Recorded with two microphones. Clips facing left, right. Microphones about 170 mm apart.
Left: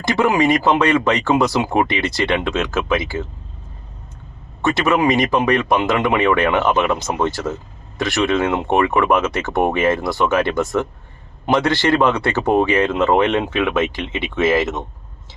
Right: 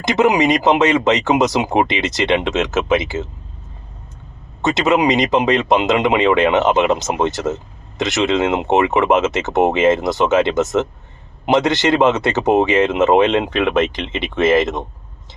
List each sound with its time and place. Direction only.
0.0 s speech: 20° right (ahead or behind)
4.6 s speech: 20° right (ahead or behind)